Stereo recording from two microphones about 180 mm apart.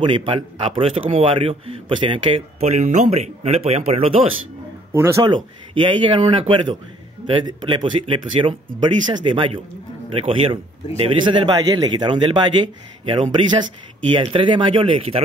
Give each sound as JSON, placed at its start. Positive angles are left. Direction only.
{"t": 0.0, "sound": "a man's voice", "side_deg": -25}
{"t": 4.9, "sound": "speech", "side_deg": -15}
{"t": 5.3, "sound": "speech", "side_deg": -25}